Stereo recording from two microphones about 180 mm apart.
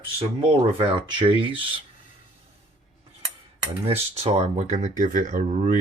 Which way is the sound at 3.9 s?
35° right (ahead or behind).